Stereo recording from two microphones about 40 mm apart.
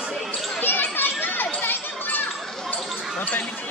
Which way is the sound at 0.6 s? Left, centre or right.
Left.